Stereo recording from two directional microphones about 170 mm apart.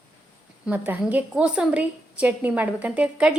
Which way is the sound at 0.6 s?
10° right (ahead or behind).